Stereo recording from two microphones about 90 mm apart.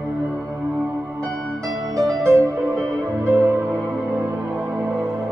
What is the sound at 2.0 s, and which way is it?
Music, 35° right (ahead or behind).